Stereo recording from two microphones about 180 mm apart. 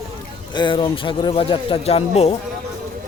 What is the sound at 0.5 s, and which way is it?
Speech, 25° left (ahead or behind).